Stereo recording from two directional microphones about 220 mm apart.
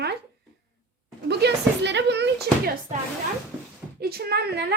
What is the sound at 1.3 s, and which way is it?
A woman's voice, 50° right (ahead or behind).